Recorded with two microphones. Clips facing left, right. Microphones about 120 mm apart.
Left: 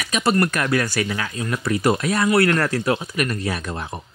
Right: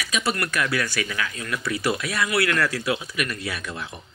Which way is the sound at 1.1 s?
35° left (ahead or behind).